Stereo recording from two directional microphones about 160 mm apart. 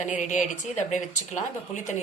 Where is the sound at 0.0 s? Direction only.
50° left (ahead or behind).